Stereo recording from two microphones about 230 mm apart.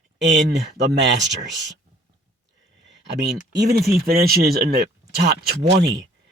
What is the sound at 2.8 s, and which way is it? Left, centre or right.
Speech, right.